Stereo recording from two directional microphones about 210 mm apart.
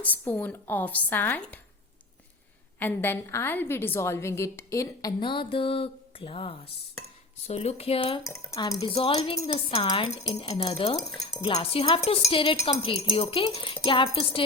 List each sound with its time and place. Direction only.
0.0 s a woman's voice: 10° left (ahead or behind)
2.7 s a woman's voice: 10° left (ahead or behind); by 8.2 s 25° left (ahead or behind)
8.2 s a woman's voice: 15° left (ahead or behind)
8.8 s speech: 25° left (ahead or behind)